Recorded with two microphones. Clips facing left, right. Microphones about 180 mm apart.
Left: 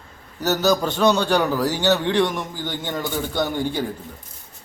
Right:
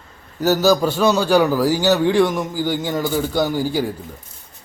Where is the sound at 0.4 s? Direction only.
5° right (ahead or behind).